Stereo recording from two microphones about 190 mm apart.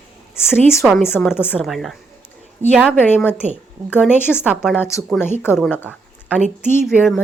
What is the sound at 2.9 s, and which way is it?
Speech, 10° left (ahead or behind).